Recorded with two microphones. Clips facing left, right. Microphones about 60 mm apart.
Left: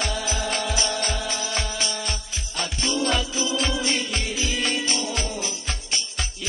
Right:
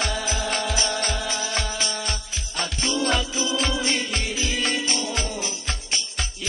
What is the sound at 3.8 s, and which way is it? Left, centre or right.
Music, right.